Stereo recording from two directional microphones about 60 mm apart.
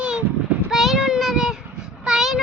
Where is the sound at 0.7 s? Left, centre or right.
Centre.